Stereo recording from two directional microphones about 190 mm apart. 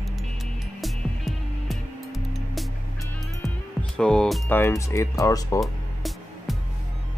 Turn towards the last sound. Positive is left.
turn(degrees=0)  # may be behind; listen again after turning